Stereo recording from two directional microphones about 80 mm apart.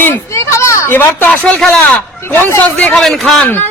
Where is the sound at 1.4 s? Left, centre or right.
Centre.